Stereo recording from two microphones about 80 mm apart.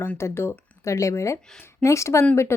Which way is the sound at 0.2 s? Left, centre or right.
Left.